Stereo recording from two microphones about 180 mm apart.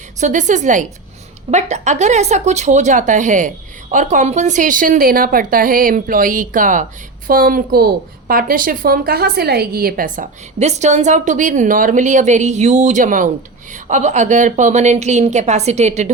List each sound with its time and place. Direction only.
0.2 s a woman's voice: 45° right (ahead or behind)
10.6 s a woman's voice: 40° right (ahead or behind)